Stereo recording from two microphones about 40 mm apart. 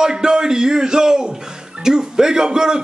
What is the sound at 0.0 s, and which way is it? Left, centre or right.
Speech, centre.